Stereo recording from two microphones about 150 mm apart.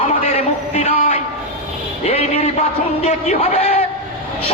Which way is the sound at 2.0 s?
40° left (ahead or behind).